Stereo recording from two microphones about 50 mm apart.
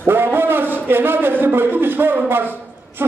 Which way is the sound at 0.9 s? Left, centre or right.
Right.